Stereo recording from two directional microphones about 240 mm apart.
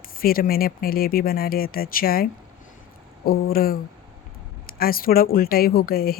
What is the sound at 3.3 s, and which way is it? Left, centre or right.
Speech, left.